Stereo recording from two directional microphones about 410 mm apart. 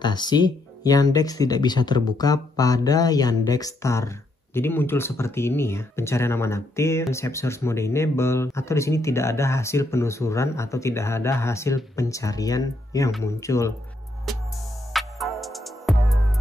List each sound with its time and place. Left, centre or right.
0.0 s speech: centre
14.3 s music: centre